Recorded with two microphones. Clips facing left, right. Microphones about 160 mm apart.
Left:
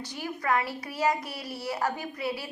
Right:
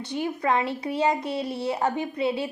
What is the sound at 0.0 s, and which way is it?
A woman's voice, 25° right (ahead or behind).